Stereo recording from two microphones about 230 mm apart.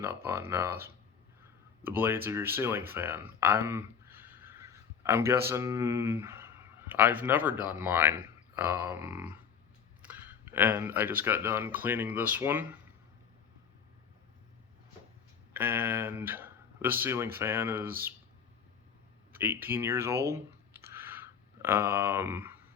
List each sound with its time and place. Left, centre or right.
0.0 s speech: centre
15.5 s speech: centre
19.3 s speech: centre